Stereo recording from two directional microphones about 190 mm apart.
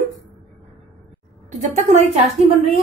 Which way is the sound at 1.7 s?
40° right (ahead or behind).